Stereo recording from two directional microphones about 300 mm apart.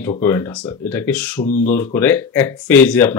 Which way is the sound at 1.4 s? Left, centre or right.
Left.